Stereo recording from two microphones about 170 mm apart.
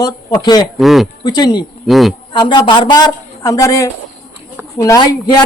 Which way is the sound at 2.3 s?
25° left (ahead or behind).